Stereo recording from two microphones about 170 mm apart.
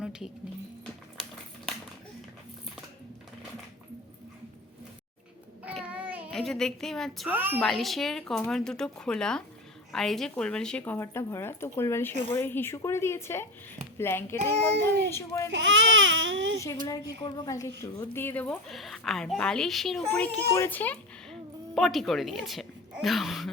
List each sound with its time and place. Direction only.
0.0 s a sound: 5° right (ahead or behind)
5.6 s a sound: 5° right (ahead or behind)
7.3 s a woman's voice: 10° right (ahead or behind)
7.6 s speech: centre (ahead or behind); by 15.4 s 15° left (ahead or behind)
15.4 s speech: 90° right
16.8 s a woman's voice: 20° left (ahead or behind); by 23.5 s centre (ahead or behind)